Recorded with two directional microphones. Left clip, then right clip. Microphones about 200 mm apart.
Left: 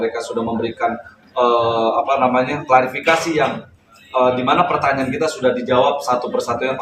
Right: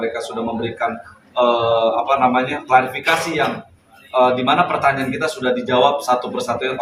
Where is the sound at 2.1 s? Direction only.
5° left (ahead or behind).